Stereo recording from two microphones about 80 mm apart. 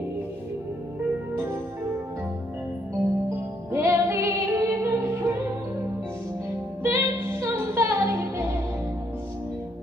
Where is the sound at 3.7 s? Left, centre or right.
Right.